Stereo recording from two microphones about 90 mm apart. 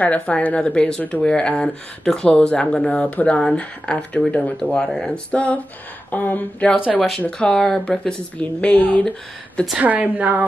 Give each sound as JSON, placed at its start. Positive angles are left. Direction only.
{"t": 0.0, "sound": "speech", "side_deg": 15}
{"t": 9.8, "sound": "a woman's voice", "side_deg": -15}